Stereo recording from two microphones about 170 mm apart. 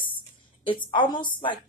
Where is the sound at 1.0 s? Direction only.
25° left (ahead or behind).